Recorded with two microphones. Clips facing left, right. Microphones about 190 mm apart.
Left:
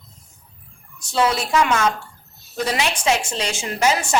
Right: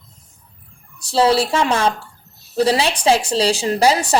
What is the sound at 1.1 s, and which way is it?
A woman's voice, 30° right (ahead or behind).